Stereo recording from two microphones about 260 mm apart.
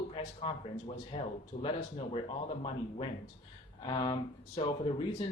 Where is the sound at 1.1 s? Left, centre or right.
Left.